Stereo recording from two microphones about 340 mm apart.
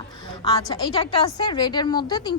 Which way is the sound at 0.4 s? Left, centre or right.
Centre.